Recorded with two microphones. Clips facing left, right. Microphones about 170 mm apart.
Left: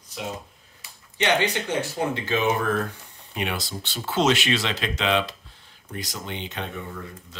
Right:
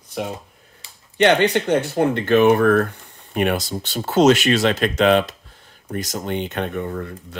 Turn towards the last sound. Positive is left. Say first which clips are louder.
# right 9 dB
turn(degrees=-55)  # may be behind; listen again after turning